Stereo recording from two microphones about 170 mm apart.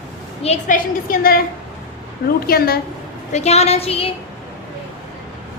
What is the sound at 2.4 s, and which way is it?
Speech, 65° left (ahead or behind).